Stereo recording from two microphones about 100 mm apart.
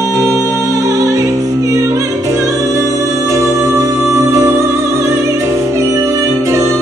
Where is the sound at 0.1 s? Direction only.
30° right (ahead or behind).